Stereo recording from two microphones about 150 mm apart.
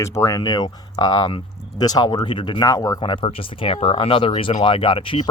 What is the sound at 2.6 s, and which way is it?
Speech, 20° left (ahead or behind).